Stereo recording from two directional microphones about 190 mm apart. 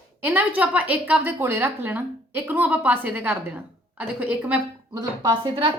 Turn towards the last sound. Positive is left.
turn(degrees=-30)  # may be behind; listen again after turning